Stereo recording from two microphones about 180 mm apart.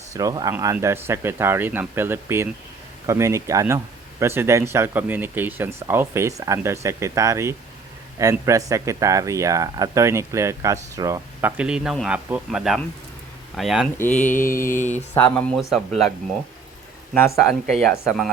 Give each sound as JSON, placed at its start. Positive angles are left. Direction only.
{"t": 0.1, "sound": "speech", "side_deg": -20}
{"t": 14.2, "sound": "mantra", "side_deg": 45}
{"t": 15.1, "sound": "speech", "side_deg": 10}
{"t": 17.2, "sound": "speech", "side_deg": 0}